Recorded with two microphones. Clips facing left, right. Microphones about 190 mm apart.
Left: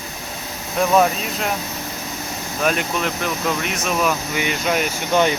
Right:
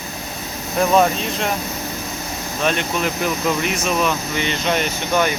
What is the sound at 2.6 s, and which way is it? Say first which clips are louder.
Speech: even; 5° left (ahead or behind).